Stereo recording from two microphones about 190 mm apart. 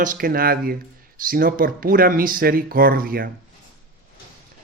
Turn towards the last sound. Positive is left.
turn(degrees=-50)  # may be behind; listen again after turning